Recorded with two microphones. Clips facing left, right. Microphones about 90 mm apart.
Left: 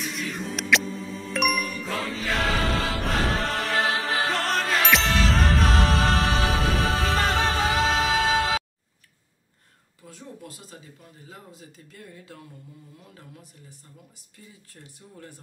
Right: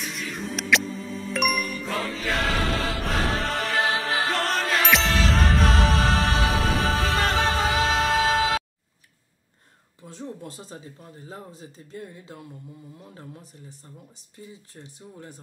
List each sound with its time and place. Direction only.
0.0 s ding: centre (ahead or behind)
10.0 s speech: 30° right (ahead or behind)